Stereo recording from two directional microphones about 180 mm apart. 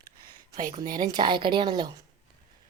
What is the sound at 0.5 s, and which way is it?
Speech, 45° right (ahead or behind).